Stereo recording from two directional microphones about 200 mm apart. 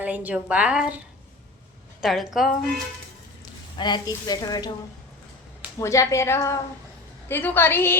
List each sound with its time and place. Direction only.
0.0 s a woman's voice: 5° right (ahead or behind)
2.0 s a woman's voice: centre (ahead or behind)
3.8 s speech: 20° left (ahead or behind)
5.8 s a woman's voice: 15° left (ahead or behind)